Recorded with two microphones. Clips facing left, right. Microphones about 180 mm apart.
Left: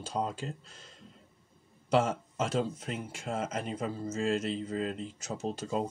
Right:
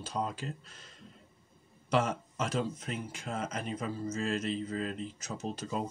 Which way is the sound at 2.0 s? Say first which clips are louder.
Left 2 dB; 25° left (ahead or behind).